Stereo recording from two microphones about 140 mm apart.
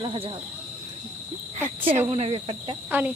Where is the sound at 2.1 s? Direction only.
50° right (ahead or behind).